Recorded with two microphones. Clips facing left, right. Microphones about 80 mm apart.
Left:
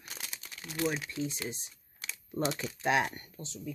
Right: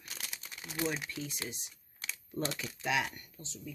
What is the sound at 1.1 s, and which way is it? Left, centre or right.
Speech, left.